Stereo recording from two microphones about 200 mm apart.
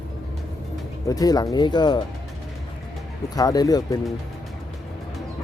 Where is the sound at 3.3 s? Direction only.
20° left (ahead or behind).